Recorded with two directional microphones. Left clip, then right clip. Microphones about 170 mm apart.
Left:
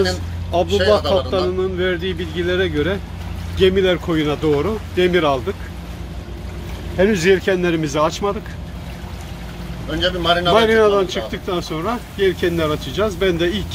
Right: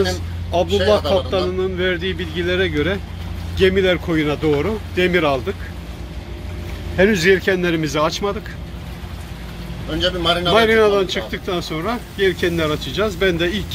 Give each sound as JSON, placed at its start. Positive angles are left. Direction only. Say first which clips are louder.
{"t": 0.0, "sound": "speech", "louder": "left 1 dB", "side_deg": 0}
{"t": 7.2, "sound": "speech", "louder": "even", "side_deg": 10}
{"t": 9.8, "sound": "speech", "louder": "left 1 dB", "side_deg": -10}
{"t": 10.5, "sound": "speech", "louder": "even", "side_deg": 0}